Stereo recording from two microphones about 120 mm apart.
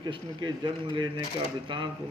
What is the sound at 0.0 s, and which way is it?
A man's voice, 40° right (ahead or behind).